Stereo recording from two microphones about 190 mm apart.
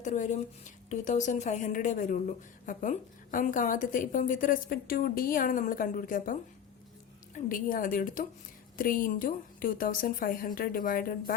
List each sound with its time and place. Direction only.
0.0 s a woman's voice: 40° left (ahead or behind)
7.3 s a woman's voice: 45° left (ahead or behind)